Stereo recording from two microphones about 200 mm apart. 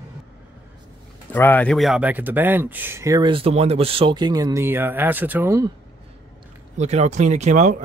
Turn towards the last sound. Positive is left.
turn(degrees=-35)  # may be behind; listen again after turning